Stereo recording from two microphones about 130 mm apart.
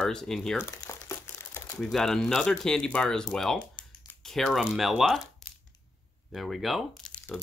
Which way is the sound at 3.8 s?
35° left (ahead or behind).